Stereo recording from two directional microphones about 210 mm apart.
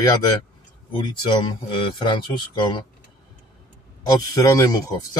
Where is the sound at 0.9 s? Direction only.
20° left (ahead or behind).